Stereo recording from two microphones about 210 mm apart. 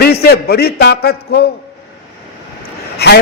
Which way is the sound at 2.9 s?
50° left (ahead or behind).